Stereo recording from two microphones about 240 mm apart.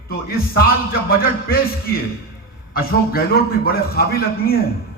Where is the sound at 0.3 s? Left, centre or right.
Left.